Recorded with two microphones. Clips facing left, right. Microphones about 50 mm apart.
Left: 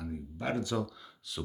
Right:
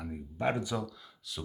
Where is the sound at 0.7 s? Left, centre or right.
Centre.